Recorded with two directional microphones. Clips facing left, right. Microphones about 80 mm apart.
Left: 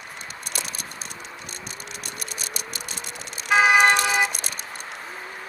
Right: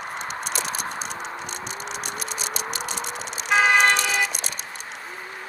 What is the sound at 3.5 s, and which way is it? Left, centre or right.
Vehicle, centre.